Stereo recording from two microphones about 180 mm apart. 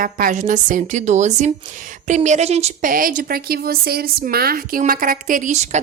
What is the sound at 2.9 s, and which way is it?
A woman's voice, 50° right (ahead or behind).